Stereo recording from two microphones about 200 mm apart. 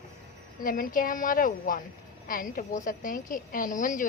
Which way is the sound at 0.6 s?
45° left (ahead or behind).